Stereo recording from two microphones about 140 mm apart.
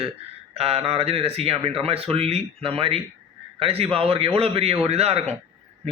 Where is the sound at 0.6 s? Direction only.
45° right (ahead or behind).